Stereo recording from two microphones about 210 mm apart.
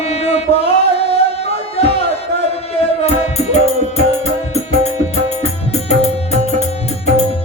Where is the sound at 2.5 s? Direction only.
30° left (ahead or behind).